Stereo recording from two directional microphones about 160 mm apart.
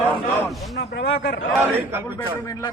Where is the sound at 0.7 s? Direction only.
90° left.